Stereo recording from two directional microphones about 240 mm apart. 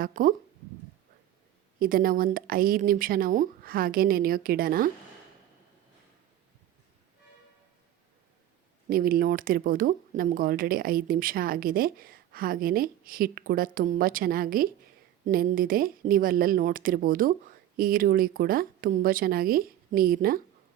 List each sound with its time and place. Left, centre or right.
0.0 s speech: right
1.8 s speech: right
8.9 s speech: right